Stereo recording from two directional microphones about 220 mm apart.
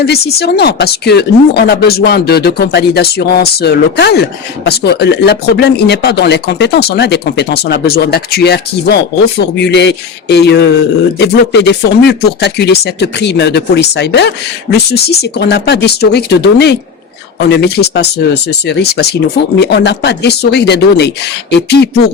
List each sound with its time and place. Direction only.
0.0 s speech: 45° left (ahead or behind)